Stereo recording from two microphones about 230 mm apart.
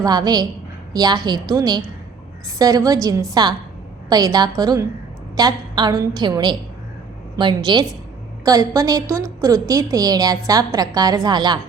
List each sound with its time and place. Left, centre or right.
0.0 s a woman's voice: centre